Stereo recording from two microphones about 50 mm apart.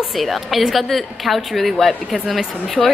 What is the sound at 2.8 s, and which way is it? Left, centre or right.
Speech, right.